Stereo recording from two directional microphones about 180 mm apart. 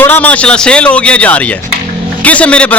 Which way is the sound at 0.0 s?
10° left (ahead or behind).